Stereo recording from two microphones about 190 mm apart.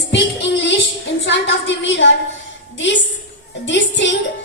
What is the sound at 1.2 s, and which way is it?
Speech, 70° left (ahead or behind).